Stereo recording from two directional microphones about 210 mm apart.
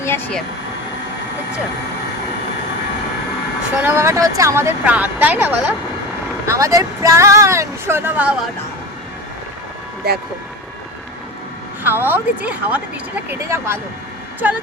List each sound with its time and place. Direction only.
0.0 s speech: 10° left (ahead or behind)
3.8 s speech: 10° right (ahead or behind)
11.8 s speech: 10° right (ahead or behind)